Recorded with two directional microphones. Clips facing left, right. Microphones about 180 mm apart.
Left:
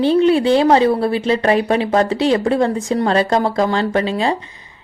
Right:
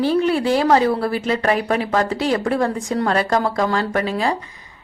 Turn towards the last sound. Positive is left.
turn(degrees=25)  # may be behind; listen again after turning